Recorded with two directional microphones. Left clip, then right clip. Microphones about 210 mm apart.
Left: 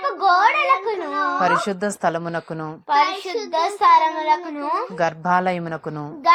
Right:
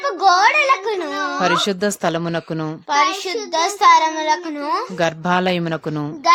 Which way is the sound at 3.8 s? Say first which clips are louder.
Right 2 dB; 90° right.